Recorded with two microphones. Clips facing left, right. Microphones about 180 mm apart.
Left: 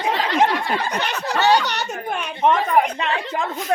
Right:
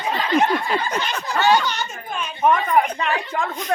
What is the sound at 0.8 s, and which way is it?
Speech, 65° left (ahead or behind).